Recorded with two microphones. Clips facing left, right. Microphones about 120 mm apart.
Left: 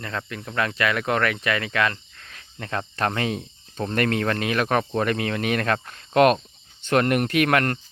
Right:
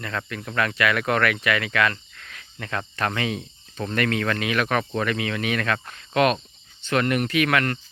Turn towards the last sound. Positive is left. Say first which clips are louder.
# left 2 dB
turn(degrees=45)  # may be behind; listen again after turning